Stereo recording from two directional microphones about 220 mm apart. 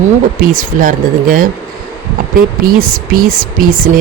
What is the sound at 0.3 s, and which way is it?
Speech, 40° right (ahead or behind).